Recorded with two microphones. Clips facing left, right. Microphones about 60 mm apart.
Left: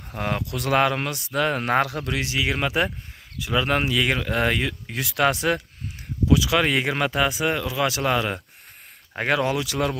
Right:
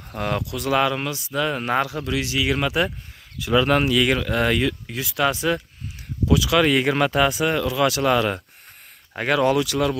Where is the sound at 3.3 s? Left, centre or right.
Centre.